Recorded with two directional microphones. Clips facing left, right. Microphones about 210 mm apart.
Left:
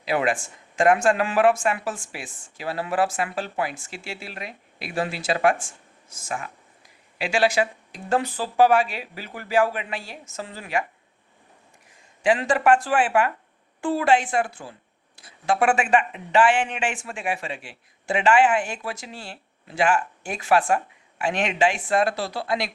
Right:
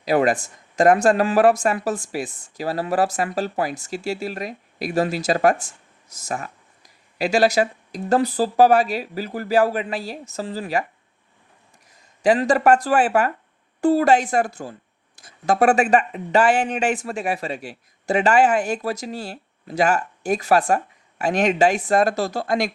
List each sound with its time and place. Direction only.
0.0 s speech: 40° right (ahead or behind)
12.2 s speech: 40° right (ahead or behind)